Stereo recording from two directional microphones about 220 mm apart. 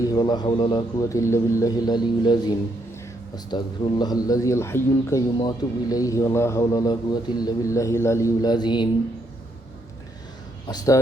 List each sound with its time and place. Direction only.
0.0 s speech: 20° left (ahead or behind)
10.7 s speech: 15° left (ahead or behind)